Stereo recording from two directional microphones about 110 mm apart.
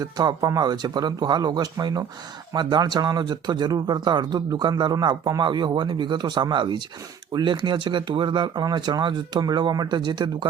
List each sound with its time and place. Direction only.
0.0 s speech: 35° right (ahead or behind)